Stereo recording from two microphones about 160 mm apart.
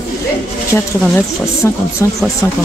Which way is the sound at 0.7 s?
15° left (ahead or behind).